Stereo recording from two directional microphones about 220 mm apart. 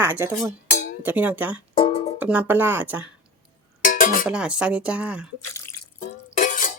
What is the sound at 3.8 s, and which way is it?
Music, 40° left (ahead or behind).